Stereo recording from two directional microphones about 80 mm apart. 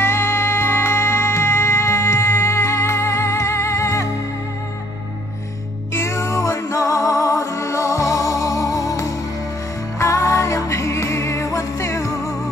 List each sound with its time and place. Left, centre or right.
0.0 s music: left
5.9 s music: left